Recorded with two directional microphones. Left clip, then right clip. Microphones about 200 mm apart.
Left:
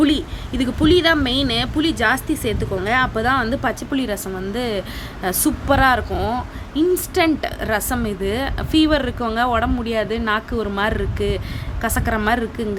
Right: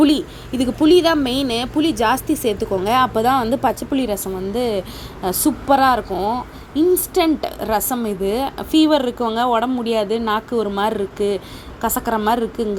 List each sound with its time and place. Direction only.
0.0 s a woman's voice: 5° right (ahead or behind)